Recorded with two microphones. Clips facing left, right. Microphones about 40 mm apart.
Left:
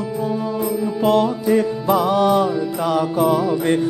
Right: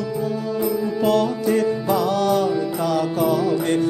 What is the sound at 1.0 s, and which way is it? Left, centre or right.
Music, centre.